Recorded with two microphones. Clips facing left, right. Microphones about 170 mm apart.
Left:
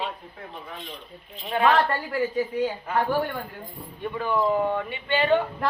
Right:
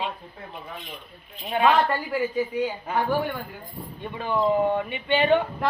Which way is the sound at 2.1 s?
5° right (ahead or behind).